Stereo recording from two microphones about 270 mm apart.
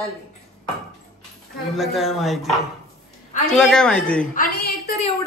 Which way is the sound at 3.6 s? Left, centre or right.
Centre.